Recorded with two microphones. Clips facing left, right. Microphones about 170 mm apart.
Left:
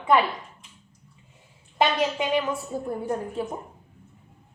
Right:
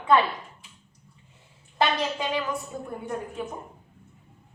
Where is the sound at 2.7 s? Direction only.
35° left (ahead or behind).